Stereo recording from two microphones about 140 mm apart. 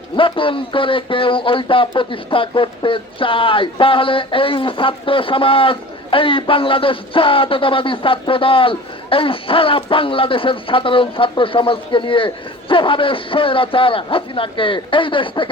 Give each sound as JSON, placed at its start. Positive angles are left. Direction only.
{"t": 0.2, "sound": "speech", "side_deg": 40}